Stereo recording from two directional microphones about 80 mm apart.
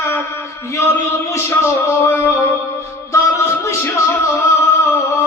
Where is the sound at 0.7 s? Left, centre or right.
Left.